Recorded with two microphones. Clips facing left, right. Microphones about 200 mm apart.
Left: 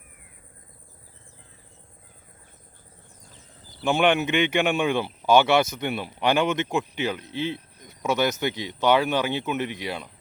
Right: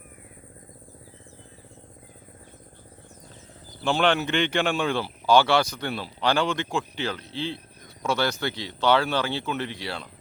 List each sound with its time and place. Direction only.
3.8 s speech: 20° left (ahead or behind)